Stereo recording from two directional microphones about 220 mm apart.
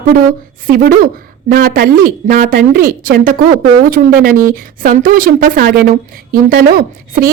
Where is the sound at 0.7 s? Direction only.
45° right (ahead or behind).